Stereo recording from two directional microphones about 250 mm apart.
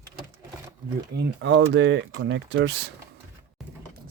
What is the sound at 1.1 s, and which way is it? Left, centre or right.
Speech, right.